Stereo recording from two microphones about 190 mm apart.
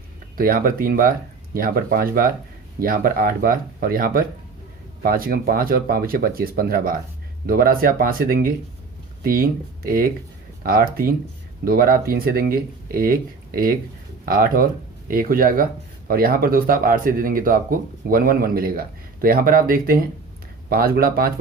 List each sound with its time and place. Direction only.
0.3 s speech: 50° right (ahead or behind)